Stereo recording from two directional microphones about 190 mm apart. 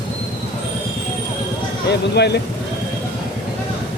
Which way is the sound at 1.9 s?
60° left (ahead or behind).